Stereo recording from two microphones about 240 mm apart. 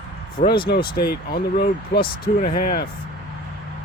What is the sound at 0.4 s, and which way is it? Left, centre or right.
Speech, left.